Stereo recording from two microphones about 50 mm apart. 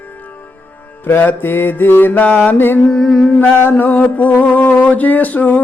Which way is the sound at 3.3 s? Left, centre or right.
Left.